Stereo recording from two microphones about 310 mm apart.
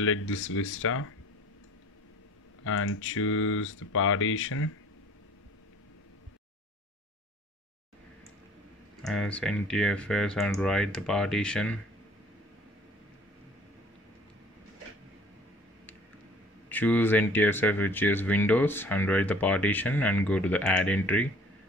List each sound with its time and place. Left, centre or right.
0.0 s speech: left
2.6 s speech: left
9.0 s speech: centre
16.6 s speech: centre